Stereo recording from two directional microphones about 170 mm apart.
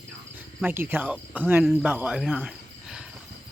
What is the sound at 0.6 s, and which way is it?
Cricket, 10° right (ahead or behind).